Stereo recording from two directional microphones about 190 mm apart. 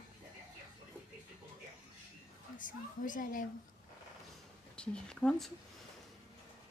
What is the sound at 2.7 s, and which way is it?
Speech, 45° left (ahead or behind).